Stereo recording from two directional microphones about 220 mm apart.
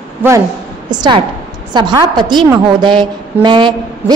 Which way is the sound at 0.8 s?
20° right (ahead or behind).